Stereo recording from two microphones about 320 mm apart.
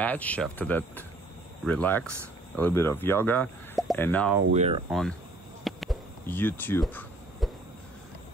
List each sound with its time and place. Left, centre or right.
0.0 s speech: centre
4.5 s speech: centre
5.6 s a sound: centre